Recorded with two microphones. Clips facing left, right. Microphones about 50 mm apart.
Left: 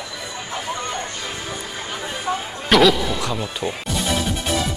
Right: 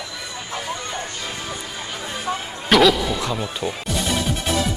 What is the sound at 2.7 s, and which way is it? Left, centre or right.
Music, centre.